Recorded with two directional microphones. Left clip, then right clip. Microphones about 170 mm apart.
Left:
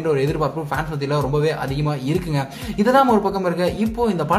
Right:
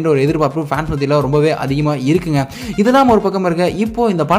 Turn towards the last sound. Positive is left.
turn(degrees=-40)  # may be behind; listen again after turning